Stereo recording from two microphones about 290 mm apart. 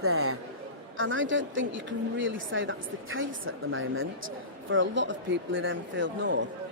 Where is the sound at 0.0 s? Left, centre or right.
Right.